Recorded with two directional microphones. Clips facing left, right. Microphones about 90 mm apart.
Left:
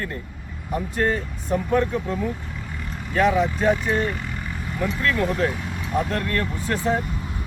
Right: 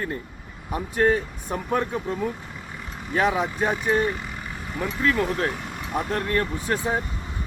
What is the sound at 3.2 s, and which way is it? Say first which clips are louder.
Speech: left 4 dB; 15° right (ahead or behind).